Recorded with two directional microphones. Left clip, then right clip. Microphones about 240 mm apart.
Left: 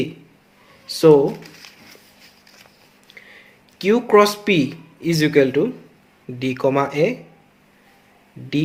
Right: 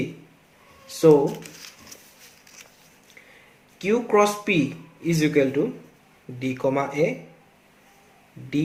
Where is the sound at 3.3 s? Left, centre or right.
Left.